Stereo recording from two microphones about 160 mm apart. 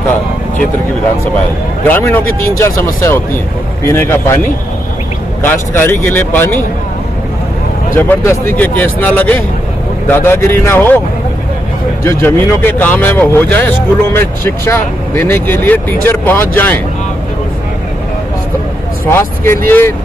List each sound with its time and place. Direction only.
1.9 s speech: 15° left (ahead or behind)
5.4 s speech: 10° left (ahead or behind)
7.9 s speech: 15° left (ahead or behind)
12.0 s speech: 15° left (ahead or behind)
19.0 s speech: 15° left (ahead or behind)